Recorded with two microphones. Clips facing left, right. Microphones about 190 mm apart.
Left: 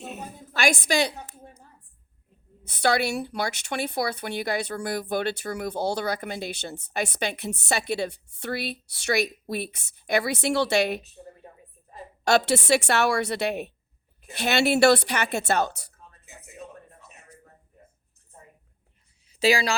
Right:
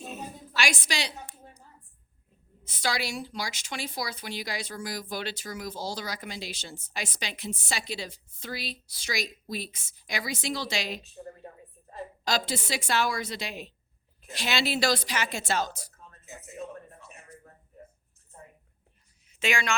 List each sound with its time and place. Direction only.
0.0 s a sound: 60° left (ahead or behind)
2.6 s speech: 60° left (ahead or behind)
12.2 s a woman's voice: 70° left (ahead or behind)
19.3 s speech: 35° left (ahead or behind)